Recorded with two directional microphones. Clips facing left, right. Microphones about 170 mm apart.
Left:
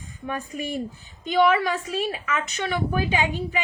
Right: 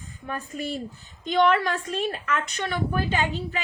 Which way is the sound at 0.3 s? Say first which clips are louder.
Left 1 dB; 15° left (ahead or behind).